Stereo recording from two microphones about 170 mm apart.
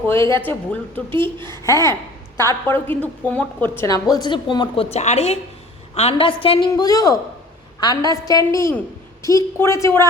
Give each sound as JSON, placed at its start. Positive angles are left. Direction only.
{"t": 0.1, "sound": "a woman's voice", "side_deg": 15}
{"t": 4.1, "sound": "a woman's voice", "side_deg": 25}